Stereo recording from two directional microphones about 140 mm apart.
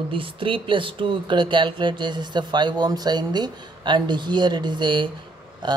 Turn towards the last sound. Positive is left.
turn(degrees=-30)  # may be behind; listen again after turning